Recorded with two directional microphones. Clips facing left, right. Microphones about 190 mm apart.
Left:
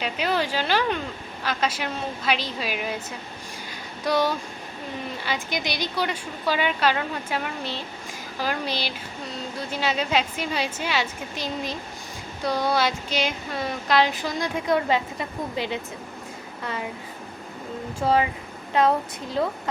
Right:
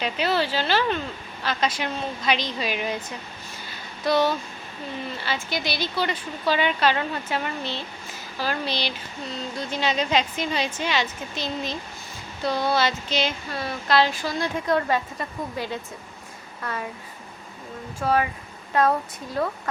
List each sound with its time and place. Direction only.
0.0 s speech: 10° left (ahead or behind)
3.7 s a sound: 10° left (ahead or behind)
5.1 s speech: 15° left (ahead or behind)
18.0 s speech: 20° left (ahead or behind)